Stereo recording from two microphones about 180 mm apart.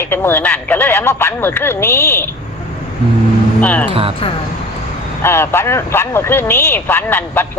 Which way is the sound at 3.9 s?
30° right (ahead or behind).